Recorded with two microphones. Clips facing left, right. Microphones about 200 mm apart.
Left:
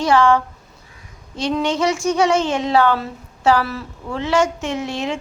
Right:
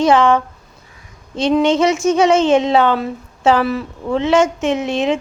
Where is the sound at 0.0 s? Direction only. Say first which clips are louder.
Right 3 dB; 20° right (ahead or behind).